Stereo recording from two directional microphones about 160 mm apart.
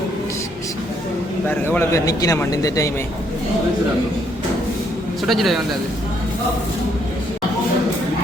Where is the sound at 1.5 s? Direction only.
10° left (ahead or behind).